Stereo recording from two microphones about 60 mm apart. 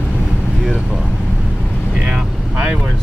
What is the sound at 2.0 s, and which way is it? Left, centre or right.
Vehicle, right.